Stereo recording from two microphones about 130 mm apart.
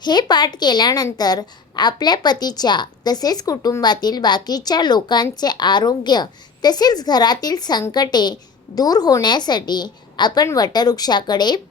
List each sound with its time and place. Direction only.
0.0 s a woman's voice: 35° left (ahead or behind)